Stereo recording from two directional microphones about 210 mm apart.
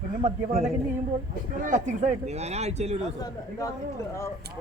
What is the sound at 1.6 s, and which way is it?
Speech, 35° right (ahead or behind).